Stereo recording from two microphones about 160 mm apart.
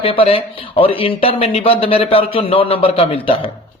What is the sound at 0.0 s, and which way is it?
Speech, 35° left (ahead or behind).